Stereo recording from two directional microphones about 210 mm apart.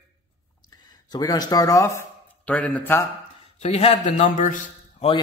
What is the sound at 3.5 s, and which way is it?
A man's voice, 30° left (ahead or behind).